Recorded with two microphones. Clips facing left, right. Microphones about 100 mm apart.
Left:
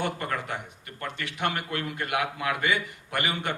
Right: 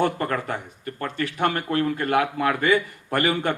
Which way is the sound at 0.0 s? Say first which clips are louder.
Right 7 dB; 50° right (ahead or behind).